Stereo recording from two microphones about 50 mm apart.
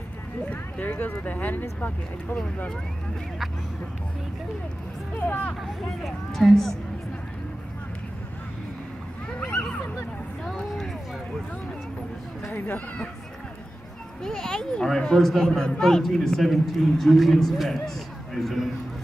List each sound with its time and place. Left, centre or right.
0.5 s speech: left
5.1 s speech: left
6.0 s a man's voice: centre
9.4 s a sound: left
10.4 s vehicle: centre
12.5 s speech: left
14.2 s a man's voice: centre